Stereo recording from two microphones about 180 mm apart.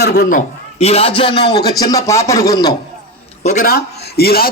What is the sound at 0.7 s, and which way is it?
A man's voice, 35° left (ahead or behind).